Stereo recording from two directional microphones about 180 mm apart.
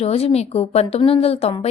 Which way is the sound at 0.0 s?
35° left (ahead or behind).